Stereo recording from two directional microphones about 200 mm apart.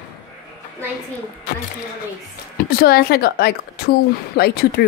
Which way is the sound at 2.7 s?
50° left (ahead or behind).